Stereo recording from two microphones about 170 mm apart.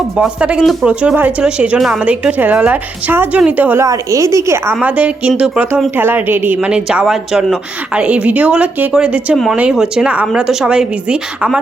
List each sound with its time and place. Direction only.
0.2 s speech: 5° right (ahead or behind)